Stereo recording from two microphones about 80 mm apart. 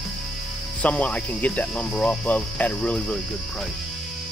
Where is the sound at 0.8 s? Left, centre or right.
Centre.